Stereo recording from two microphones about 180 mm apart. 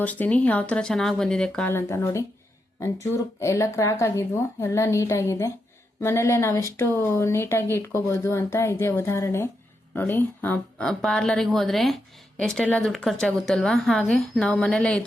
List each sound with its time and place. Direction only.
0.0 s a woman's voice: 10° left (ahead or behind)